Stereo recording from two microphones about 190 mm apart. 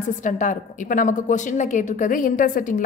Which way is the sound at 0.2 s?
40° left (ahead or behind).